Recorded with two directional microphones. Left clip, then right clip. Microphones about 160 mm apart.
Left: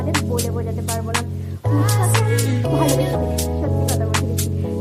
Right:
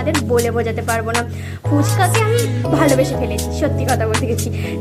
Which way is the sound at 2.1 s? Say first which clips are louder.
Right 4 dB; centre (ahead or behind).